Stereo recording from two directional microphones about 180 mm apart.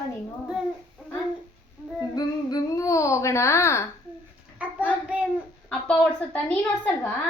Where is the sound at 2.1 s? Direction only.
20° left (ahead or behind).